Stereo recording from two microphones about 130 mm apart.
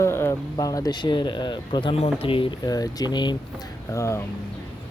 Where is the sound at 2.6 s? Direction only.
30° left (ahead or behind).